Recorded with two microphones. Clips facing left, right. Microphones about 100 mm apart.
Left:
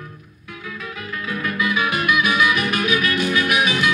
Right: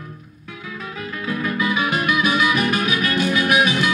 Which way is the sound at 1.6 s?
40° right (ahead or behind).